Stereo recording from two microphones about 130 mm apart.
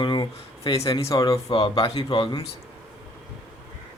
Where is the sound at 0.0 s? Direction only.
40° left (ahead or behind).